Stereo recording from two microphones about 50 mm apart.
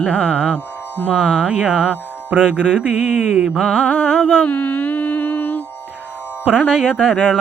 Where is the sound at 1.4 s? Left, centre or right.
Right.